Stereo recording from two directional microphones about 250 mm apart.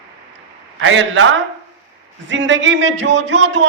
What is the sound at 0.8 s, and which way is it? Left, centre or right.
A woman's voice, right.